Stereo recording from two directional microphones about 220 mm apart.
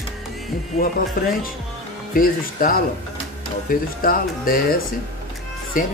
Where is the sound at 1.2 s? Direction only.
40° left (ahead or behind).